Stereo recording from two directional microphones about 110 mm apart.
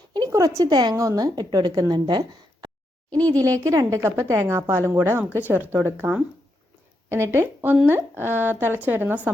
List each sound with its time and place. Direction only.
0.1 s a woman's voice: 35° right (ahead or behind); by 9.3 s 15° right (ahead or behind)